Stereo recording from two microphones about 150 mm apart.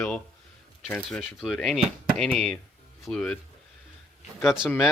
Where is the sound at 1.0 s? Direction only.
Centre (ahead or behind).